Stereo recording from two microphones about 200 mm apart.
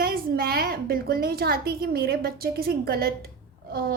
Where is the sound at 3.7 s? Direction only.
50° right (ahead or behind).